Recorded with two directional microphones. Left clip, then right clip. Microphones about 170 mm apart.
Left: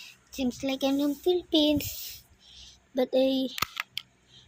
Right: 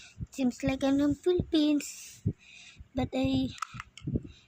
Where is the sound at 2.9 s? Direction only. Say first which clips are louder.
Left 6 dB; 40° right (ahead or behind).